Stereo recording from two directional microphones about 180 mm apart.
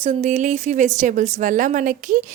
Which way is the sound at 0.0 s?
40° right (ahead or behind).